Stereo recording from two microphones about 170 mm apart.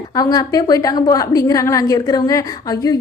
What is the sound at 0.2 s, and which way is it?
A woman's voice, 25° left (ahead or behind).